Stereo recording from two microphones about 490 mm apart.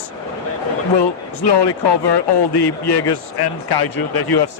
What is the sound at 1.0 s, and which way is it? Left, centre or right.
Speech, left.